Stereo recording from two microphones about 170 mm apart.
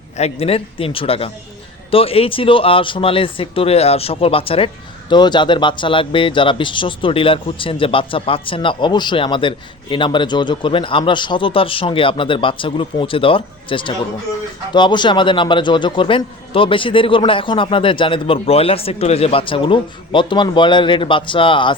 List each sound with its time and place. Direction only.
0.2 s a man's voice: 35° left (ahead or behind)